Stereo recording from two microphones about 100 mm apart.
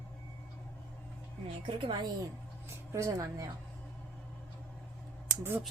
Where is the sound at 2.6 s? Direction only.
30° right (ahead or behind).